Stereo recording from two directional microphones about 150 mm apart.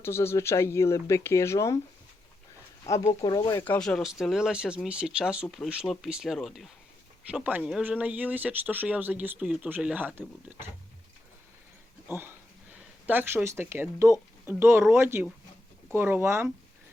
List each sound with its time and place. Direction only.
0.0 s speech: 15° left (ahead or behind)
2.8 s speech: 20° left (ahead or behind)
3.6 s speech: 10° left (ahead or behind); by 10.7 s 10° right (ahead or behind)
12.0 s speech: 15° right (ahead or behind)